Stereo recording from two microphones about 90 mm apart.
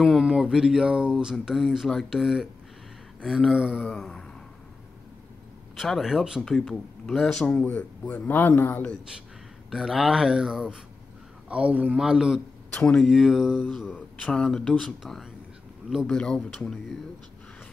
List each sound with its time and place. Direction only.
0.0 s speech: 10° right (ahead or behind)
3.8 s speech: 5° left (ahead or behind)
5.8 s speech: centre (ahead or behind)
7.4 s speech: 15° left (ahead or behind)
9.7 s speech: 5° right (ahead or behind)
12.0 s speech: 5° right (ahead or behind)
12.7 s speech: 10° left (ahead or behind)
13.0 s speech: 5° right (ahead or behind)